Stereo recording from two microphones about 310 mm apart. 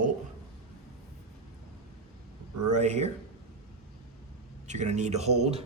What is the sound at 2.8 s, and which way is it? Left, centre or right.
Speech, right.